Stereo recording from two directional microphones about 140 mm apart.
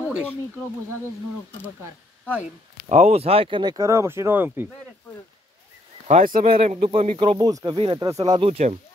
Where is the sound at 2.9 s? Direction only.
55° right (ahead or behind); by 4.6 s 15° right (ahead or behind).